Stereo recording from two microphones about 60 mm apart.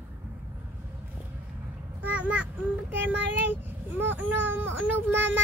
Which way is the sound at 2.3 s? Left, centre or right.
Right.